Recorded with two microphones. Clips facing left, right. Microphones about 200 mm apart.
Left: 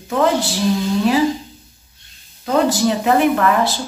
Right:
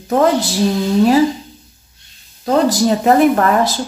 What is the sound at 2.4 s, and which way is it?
Speech, 40° right (ahead or behind).